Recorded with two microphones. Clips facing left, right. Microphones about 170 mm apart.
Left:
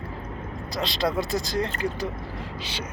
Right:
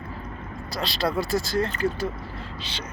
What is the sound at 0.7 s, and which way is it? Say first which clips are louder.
Speech: even; 20° left (ahead or behind).